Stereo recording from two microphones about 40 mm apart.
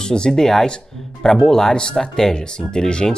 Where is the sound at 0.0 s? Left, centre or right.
Centre.